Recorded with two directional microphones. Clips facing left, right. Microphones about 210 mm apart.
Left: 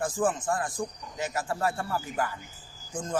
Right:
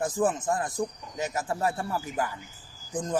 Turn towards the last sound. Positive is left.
turn(degrees=-15)  # may be behind; listen again after turning